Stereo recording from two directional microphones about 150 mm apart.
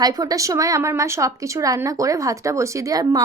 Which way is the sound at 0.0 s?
25° right (ahead or behind).